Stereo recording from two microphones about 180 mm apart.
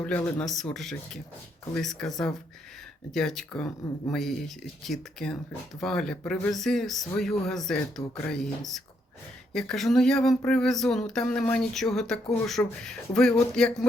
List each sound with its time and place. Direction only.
0.0 s speech: 10° left (ahead or behind)